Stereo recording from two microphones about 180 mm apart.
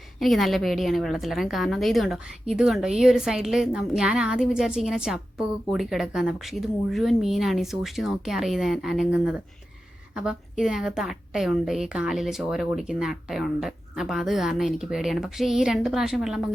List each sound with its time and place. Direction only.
0.2 s a woman's voice: centre (ahead or behind)